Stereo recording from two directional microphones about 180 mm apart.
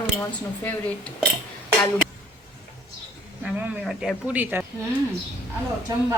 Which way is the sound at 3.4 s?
5° right (ahead or behind).